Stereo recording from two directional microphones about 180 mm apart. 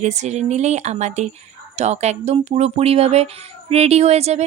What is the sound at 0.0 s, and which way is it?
Speech, 40° right (ahead or behind).